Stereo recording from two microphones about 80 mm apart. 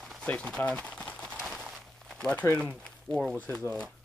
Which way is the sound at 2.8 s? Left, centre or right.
Centre.